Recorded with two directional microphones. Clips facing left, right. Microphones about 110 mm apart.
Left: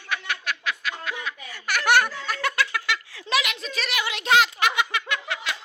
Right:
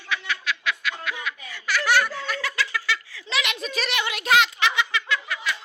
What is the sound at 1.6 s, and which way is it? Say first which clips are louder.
Snicker: left 1 dB; 55° left (ahead or behind).